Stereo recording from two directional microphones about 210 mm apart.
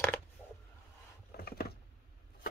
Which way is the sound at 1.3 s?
50° left (ahead or behind).